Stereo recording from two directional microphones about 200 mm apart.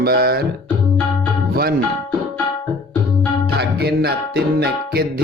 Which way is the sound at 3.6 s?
55° right (ahead or behind).